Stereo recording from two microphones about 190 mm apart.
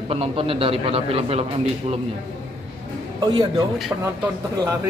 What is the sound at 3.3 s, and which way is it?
Speech, 20° right (ahead or behind).